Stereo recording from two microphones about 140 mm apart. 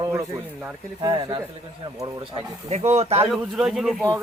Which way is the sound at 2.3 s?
50° right (ahead or behind).